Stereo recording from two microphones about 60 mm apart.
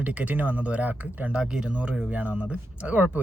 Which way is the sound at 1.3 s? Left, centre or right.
Centre.